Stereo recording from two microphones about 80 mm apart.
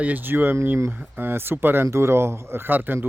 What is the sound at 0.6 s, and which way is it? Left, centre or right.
Speech, right.